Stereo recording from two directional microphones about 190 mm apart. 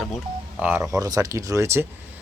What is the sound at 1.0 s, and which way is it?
Speech, 20° right (ahead or behind).